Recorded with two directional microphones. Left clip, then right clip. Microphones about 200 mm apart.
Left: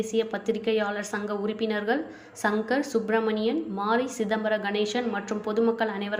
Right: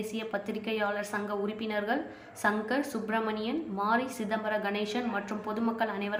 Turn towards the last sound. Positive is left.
turn(degrees=15)  # may be behind; listen again after turning